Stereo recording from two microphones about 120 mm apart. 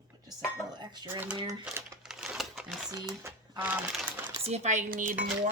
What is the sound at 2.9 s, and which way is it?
Speech, 20° right (ahead or behind).